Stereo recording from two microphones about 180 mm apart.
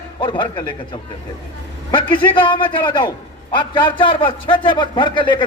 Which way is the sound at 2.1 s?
25° left (ahead or behind).